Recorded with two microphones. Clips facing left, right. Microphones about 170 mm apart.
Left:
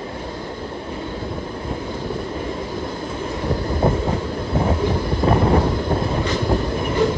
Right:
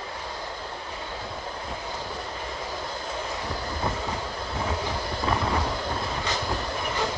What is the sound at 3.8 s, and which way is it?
Train, 50° left (ahead or behind).